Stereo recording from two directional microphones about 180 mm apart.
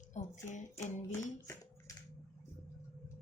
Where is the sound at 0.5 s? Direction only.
40° left (ahead or behind).